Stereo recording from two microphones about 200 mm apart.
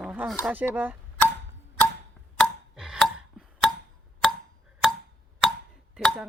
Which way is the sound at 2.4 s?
Centre (ahead or behind).